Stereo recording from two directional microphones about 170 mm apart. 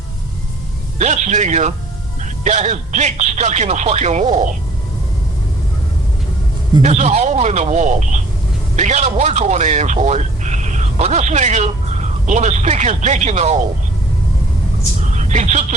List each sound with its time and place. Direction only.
0.9 s speech: 45° right (ahead or behind)
6.8 s speech: 40° right (ahead or behind)
15.0 s a sound: 45° right (ahead or behind)